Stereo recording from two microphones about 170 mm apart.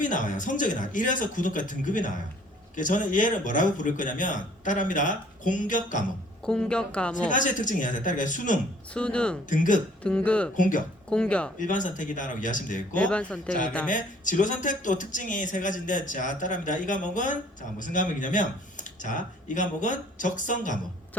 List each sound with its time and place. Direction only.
0.0 s a man's voice: 50° left (ahead or behind)
6.4 s a woman's voice: 5° left (ahead or behind)
7.3 s a man's voice: 50° left (ahead or behind)
8.9 s a man's voice: 5° left (ahead or behind)
9.5 s a man's voice: 50° left (ahead or behind)
10.0 s a man's voice: 5° left (ahead or behind)
10.6 s a man's voice: 50° left (ahead or behind)
11.1 s a woman's voice: 5° left (ahead or behind)
11.6 s a man's voice: 50° left (ahead or behind)
13.0 s a man's voice: 5° left (ahead or behind)
13.9 s a man's voice: 50° left (ahead or behind)